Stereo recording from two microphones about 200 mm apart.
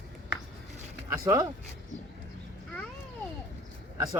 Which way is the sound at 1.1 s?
15° right (ahead or behind).